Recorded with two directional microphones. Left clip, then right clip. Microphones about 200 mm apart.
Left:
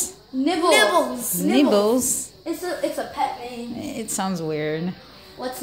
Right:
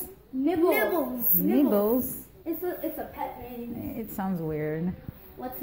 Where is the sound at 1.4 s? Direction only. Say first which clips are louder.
Left 6 dB; centre (ahead or behind).